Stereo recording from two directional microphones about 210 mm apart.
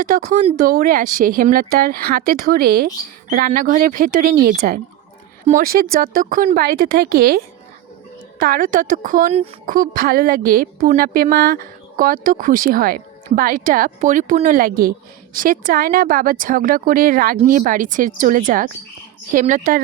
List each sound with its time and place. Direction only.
0.0 s a woman's voice: 35° right (ahead or behind)